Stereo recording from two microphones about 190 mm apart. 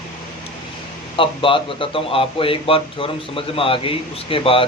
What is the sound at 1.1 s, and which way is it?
A man's voice, 25° left (ahead or behind).